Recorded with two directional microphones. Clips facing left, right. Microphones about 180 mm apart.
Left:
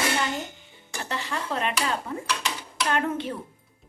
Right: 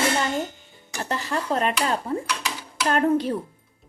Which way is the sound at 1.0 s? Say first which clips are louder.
Right 4 dB; 40° right (ahead or behind).